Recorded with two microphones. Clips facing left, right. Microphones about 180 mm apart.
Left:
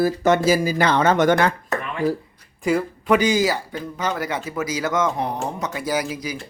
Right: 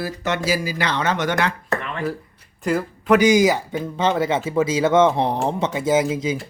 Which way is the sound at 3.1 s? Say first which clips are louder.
Right 5 dB; 15° right (ahead or behind).